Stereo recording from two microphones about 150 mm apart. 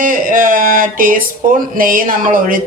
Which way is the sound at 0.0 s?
65° right (ahead or behind).